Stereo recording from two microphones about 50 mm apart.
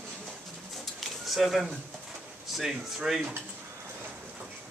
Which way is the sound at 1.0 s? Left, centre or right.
Centre.